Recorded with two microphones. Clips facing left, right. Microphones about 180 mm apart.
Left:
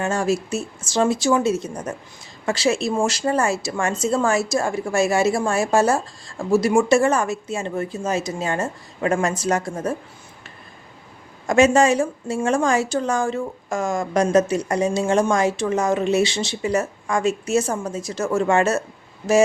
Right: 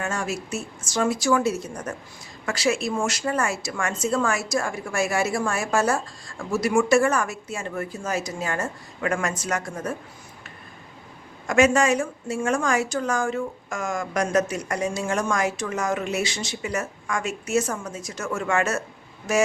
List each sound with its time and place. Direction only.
0.0 s a woman's voice: 30° left (ahead or behind)
11.4 s a woman's voice: 25° left (ahead or behind)